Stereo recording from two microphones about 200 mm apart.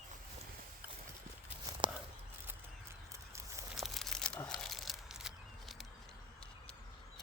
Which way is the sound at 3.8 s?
Centre (ahead or behind).